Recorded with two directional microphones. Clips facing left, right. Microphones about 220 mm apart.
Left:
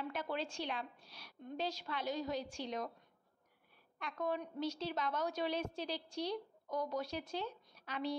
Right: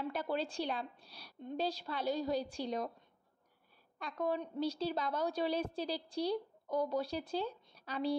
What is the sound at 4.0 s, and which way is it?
A woman's voice, 35° right (ahead or behind).